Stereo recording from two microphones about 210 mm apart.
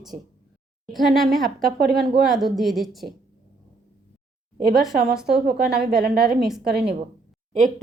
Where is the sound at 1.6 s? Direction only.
45° right (ahead or behind).